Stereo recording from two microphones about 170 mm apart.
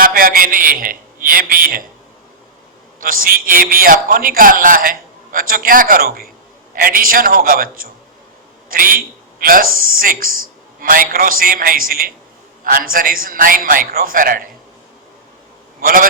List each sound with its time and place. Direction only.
0.0 s a man's voice: 55° right (ahead or behind)
3.0 s a man's voice: 55° right (ahead or behind)
15.8 s a man's voice: 60° right (ahead or behind)